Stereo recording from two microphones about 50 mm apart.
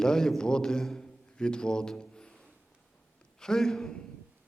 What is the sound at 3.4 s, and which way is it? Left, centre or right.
Speech, centre.